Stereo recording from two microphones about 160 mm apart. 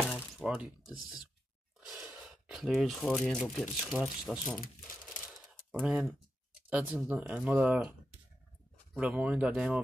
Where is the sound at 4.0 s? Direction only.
5° right (ahead or behind).